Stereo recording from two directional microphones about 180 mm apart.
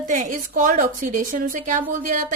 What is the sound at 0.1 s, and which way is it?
A woman's voice, 45° right (ahead or behind).